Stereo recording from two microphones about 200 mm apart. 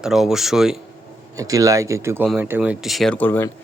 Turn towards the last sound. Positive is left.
turn(degrees=10)  # may be behind; listen again after turning